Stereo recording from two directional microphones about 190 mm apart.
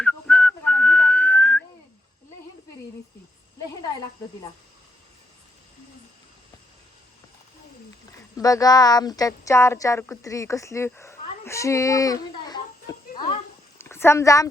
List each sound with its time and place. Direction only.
0.0 s whistling: 5° left (ahead or behind)
8.4 s speech: 20° left (ahead or behind)
13.7 s speech: 15° left (ahead or behind)